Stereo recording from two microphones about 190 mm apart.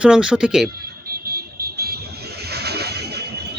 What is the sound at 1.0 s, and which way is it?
Vehicle, 55° right (ahead or behind).